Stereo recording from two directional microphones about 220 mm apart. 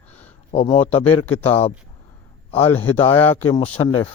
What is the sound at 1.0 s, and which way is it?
Speech, 10° left (ahead or behind).